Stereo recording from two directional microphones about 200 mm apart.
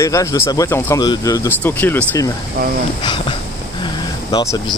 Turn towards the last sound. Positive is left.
turn(degrees=15)  # may be behind; listen again after turning